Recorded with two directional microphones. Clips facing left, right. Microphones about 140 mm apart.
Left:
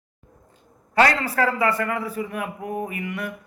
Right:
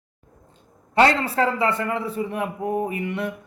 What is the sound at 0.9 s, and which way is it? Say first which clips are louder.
Speech: right 1 dB; 25° right (ahead or behind).